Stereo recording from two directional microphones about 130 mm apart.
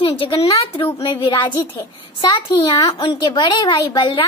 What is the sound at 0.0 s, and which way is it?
A woman's voice, 45° left (ahead or behind).